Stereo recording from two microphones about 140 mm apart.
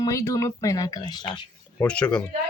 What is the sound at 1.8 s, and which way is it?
Speech, 10° left (ahead or behind).